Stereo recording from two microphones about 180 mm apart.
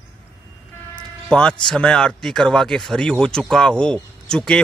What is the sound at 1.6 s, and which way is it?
Speech, 5° left (ahead or behind).